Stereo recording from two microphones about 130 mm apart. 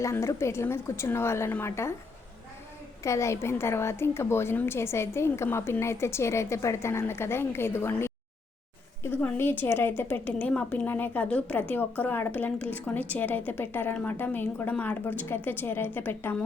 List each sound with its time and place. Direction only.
0.0 s a woman's voice: 20° left (ahead or behind)
3.0 s a woman's voice: 20° left (ahead or behind)